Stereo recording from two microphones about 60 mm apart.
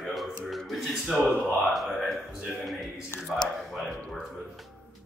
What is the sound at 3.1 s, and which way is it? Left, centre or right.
Speech, left.